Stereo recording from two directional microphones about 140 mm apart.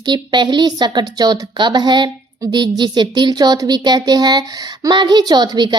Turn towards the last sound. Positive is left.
turn(degrees=-30)  # may be behind; listen again after turning